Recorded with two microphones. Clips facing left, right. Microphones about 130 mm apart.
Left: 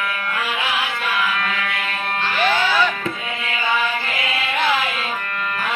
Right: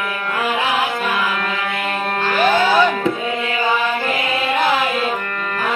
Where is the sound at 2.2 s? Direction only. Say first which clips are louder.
Right 4 dB; 45° right (ahead or behind).